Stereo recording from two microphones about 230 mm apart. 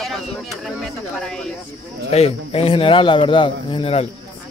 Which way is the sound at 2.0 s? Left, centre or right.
Left.